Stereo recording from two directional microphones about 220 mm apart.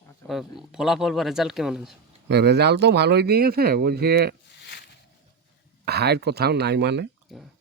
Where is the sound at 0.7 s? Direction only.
Centre (ahead or behind).